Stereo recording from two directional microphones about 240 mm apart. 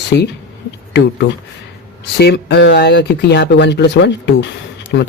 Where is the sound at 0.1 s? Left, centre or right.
Left.